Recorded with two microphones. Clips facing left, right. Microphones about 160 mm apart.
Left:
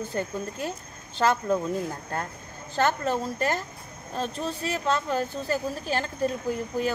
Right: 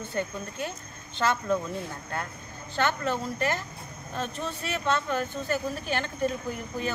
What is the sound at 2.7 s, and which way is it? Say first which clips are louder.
Speech: left 3 dB; 40° left (ahead or behind).